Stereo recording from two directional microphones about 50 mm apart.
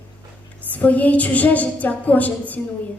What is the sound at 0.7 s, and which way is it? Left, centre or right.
A woman's voice, left.